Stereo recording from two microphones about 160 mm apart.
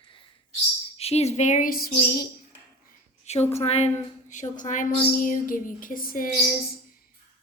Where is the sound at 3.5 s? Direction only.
40° left (ahead or behind).